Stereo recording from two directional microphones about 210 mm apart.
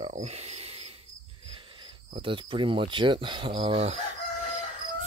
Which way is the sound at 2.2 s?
25° right (ahead or behind).